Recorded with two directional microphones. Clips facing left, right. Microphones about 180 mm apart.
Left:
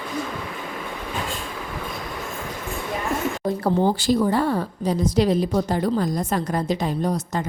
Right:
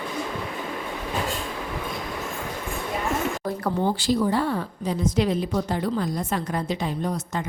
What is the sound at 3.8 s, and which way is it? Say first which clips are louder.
A woman's voice: left 1 dB; 45° left (ahead or behind).